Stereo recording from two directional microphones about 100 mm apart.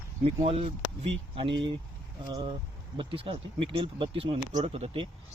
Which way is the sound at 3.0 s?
65° right (ahead or behind).